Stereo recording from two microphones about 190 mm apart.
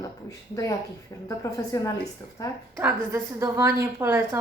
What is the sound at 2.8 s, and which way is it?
A woman's voice, 15° right (ahead or behind).